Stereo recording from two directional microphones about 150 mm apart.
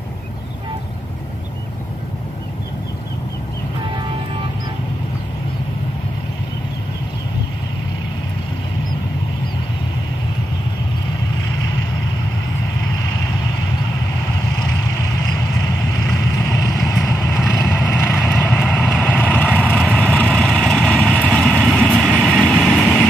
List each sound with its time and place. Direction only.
16.1 s vehicle: 20° left (ahead or behind)